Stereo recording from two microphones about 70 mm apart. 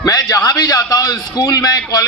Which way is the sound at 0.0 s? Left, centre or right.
Left.